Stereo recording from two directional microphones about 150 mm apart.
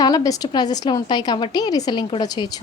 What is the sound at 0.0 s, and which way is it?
A woman's voice, 25° left (ahead or behind).